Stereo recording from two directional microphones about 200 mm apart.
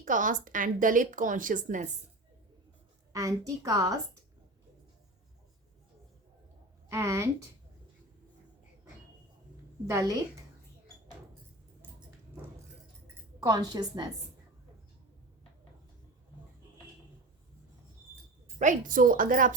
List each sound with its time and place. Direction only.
0.0 s a woman's voice: 40° right (ahead or behind)
3.1 s a woman's voice: 15° right (ahead or behind)
6.9 s a woman's voice: 15° right (ahead or behind)
9.8 s a woman's voice: 15° right (ahead or behind)
13.4 s a woman's voice: 20° right (ahead or behind)
18.6 s a woman's voice: 40° right (ahead or behind)